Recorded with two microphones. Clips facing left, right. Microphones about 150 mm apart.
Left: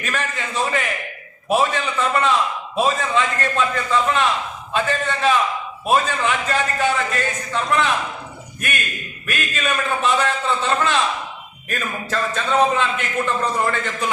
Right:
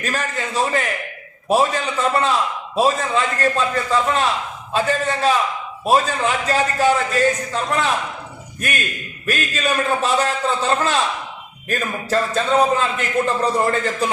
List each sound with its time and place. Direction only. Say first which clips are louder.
0.0 s a man's voice: right 2 dB; 35° right (ahead or behind)
9.2 s a man's voice: right 3 dB; 35° right (ahead or behind)